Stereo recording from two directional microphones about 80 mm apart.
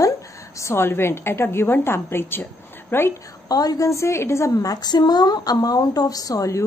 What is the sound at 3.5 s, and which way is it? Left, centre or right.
A woman's voice, left.